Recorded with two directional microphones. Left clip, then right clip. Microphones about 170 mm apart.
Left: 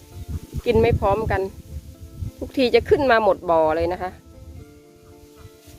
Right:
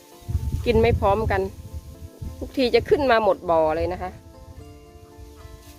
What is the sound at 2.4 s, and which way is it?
Speech, 15° left (ahead or behind).